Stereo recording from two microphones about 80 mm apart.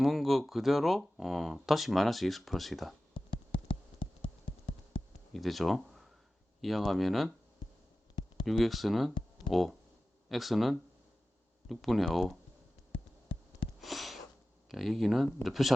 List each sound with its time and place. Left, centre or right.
0.0 s speech: centre
3.2 s a sound: left
5.3 s speech: centre
8.4 s speech: centre
13.8 s a sound: centre
14.7 s speech: centre